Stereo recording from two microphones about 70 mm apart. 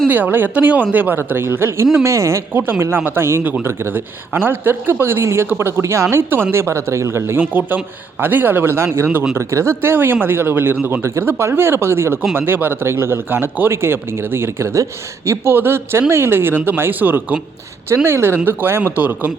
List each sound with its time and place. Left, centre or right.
0.1 s a man's voice: right
17.8 s a man's voice: right